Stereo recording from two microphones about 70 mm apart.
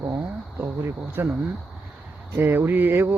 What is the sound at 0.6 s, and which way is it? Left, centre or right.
Speech, right.